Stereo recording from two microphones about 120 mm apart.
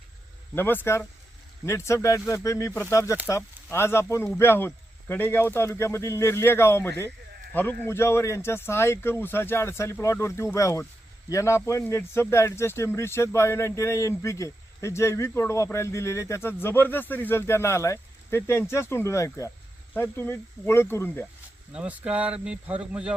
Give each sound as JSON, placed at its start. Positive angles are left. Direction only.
{"t": 0.5, "sound": "speech", "side_deg": 20}
{"t": 21.7, "sound": "speech", "side_deg": -10}